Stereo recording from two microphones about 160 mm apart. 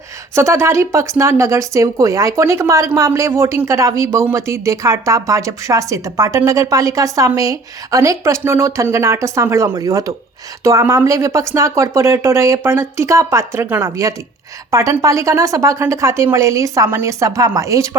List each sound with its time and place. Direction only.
0.3 s speech: 15° right (ahead or behind)